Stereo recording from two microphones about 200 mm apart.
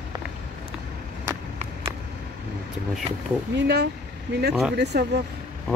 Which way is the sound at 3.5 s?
60° right (ahead or behind).